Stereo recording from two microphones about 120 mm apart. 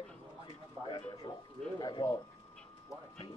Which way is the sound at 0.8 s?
30° right (ahead or behind).